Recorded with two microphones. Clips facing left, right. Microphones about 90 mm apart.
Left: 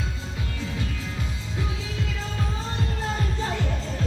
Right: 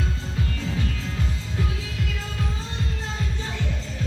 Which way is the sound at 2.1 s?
30° left (ahead or behind).